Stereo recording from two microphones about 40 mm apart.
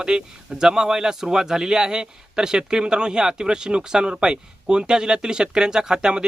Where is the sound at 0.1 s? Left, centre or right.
Centre.